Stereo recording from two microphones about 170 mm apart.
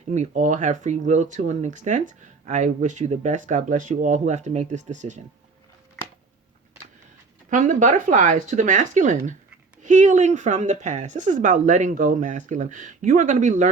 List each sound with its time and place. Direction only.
0.1 s speech: 45° right (ahead or behind)
7.5 s speech: 50° right (ahead or behind)